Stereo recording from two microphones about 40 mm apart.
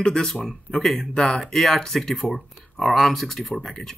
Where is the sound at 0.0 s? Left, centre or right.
Centre.